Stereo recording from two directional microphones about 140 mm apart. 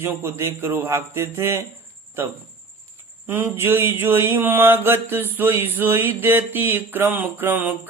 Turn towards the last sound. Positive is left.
turn(degrees=-15)  # may be behind; listen again after turning